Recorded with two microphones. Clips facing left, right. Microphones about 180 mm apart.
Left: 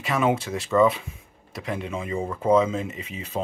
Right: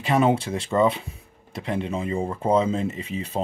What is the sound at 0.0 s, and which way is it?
Speech, 30° right (ahead or behind).